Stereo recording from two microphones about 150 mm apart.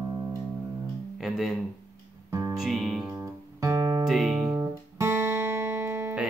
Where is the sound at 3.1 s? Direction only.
20° right (ahead or behind).